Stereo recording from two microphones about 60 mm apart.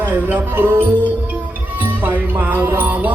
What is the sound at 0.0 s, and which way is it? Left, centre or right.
Music, right.